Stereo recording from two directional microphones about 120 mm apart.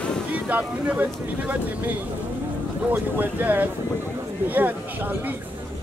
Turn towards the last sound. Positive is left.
turn(degrees=-15)  # may be behind; listen again after turning